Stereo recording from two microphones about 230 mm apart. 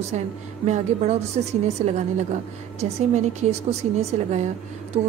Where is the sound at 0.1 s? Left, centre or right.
Right.